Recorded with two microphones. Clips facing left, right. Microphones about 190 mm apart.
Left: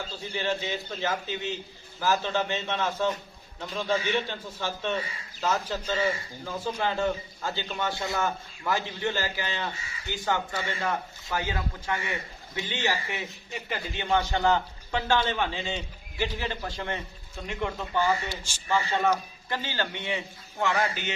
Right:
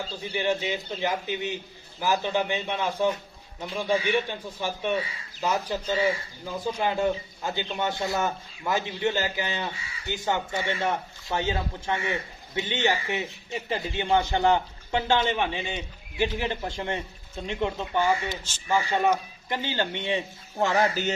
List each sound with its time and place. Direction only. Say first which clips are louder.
0.2 s a man's voice: right 3 dB; 15° right (ahead or behind)
18.3 s speech: right 3 dB; 10° left (ahead or behind)
18.7 s a man's voice: right 2 dB; 15° right (ahead or behind); by 21.1 s 35° right (ahead or behind)